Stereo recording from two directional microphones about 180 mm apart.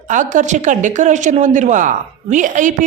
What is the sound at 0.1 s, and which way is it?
A woman's voice, 45° right (ahead or behind).